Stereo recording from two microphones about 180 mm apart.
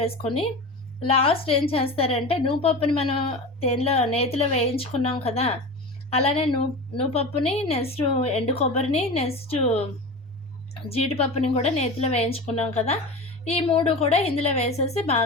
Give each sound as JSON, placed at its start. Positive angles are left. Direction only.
{"t": 1.0, "sound": "a woman's voice", "side_deg": 30}
{"t": 10.8, "sound": "a woman's voice", "side_deg": 35}